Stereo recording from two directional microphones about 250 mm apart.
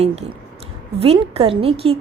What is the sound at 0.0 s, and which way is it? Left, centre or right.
A woman's voice, right.